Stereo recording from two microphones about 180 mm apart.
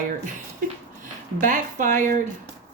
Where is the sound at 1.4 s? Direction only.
45° right (ahead or behind).